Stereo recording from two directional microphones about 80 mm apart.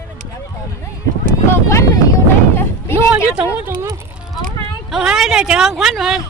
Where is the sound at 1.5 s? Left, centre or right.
Left.